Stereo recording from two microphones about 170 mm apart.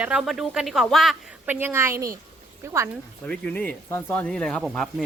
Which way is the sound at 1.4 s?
15° right (ahead or behind).